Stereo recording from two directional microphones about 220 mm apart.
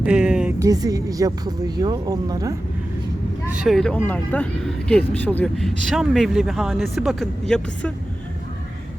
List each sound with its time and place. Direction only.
0.0 s a sound: 5° right (ahead or behind)
0.6 s speech: 15° right (ahead or behind)
3.5 s speech: centre (ahead or behind)